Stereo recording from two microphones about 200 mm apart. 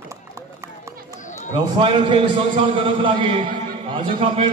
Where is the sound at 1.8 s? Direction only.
25° right (ahead or behind).